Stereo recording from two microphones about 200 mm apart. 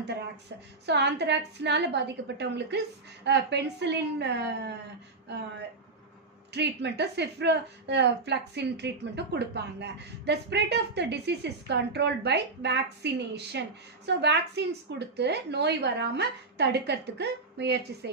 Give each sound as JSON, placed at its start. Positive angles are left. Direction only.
{"t": 0.8, "sound": "a woman's voice", "side_deg": -60}
{"t": 6.5, "sound": "a woman's voice", "side_deg": -60}